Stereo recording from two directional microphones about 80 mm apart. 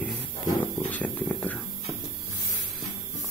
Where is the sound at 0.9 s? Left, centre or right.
Centre.